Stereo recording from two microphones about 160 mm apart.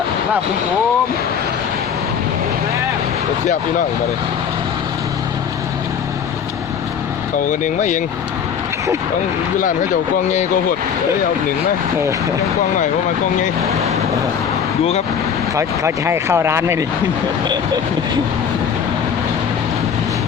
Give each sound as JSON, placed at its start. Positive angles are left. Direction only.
{"t": 7.4, "sound": "speech", "side_deg": 50}
{"t": 15.5, "sound": "speech", "side_deg": -15}